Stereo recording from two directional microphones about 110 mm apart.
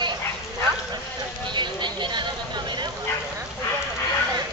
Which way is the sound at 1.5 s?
45° right (ahead or behind).